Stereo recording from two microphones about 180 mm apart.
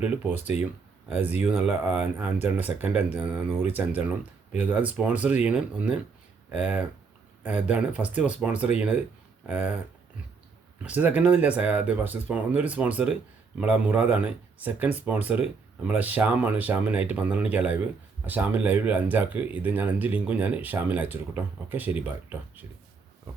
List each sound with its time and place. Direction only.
0.0 s speech: 10° right (ahead or behind)
0.3 s speech: 40° left (ahead or behind)
1.4 s speech: 10° right (ahead or behind)
10.8 s speech: 10° right (ahead or behind)